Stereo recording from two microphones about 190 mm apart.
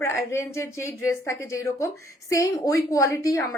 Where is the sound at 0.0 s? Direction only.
15° left (ahead or behind).